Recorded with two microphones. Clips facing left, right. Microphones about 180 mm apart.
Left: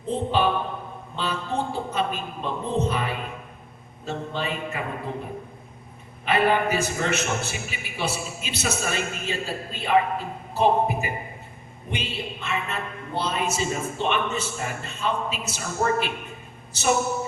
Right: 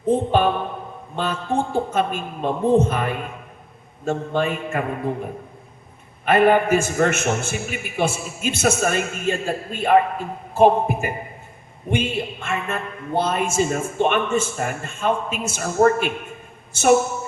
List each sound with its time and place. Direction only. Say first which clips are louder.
0.0 s a sound: right 5 dB; 50° right (ahead or behind)
1.1 s a man's voice: right 5 dB; 50° right (ahead or behind)
6.2 s a man's voice: right 6 dB; 50° right (ahead or behind)